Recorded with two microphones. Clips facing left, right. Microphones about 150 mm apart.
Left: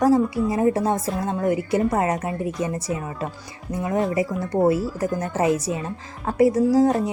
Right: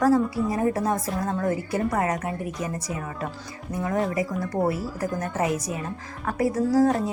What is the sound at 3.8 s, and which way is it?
A woman's voice, 25° left (ahead or behind).